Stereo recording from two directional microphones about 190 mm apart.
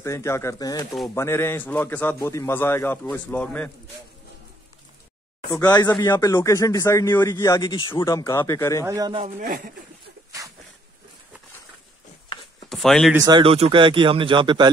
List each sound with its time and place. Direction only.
0.0 s a man's voice: 15° left (ahead or behind)
5.5 s a man's voice: 20° left (ahead or behind)
8.8 s speech: 20° right (ahead or behind)
12.6 s a sound: centre (ahead or behind)
13.1 s speech: 20° right (ahead or behind)